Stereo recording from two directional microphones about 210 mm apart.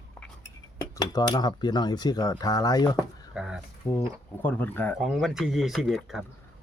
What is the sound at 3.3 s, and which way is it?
Speech, centre (ahead or behind).